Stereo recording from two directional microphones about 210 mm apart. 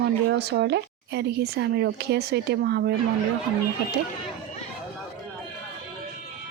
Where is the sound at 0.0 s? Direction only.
50° right (ahead or behind).